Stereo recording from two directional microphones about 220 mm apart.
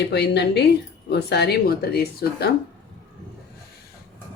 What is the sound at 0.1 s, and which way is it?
Speech, 50° left (ahead or behind).